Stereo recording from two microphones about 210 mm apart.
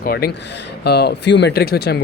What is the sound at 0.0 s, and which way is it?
Speech, 50° left (ahead or behind).